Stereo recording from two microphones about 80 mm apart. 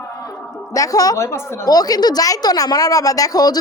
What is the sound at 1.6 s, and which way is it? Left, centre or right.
A woman's voice, left.